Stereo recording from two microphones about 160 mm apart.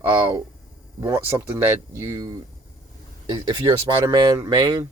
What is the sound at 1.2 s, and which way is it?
Speech, 15° right (ahead or behind).